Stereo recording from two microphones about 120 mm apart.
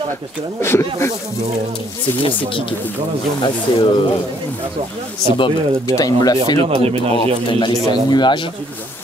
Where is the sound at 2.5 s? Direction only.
45° left (ahead or behind).